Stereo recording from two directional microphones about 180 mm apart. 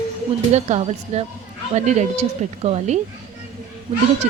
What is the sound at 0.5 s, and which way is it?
Speech, 40° right (ahead or behind).